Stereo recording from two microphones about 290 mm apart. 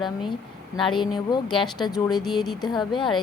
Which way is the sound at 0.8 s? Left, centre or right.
Centre.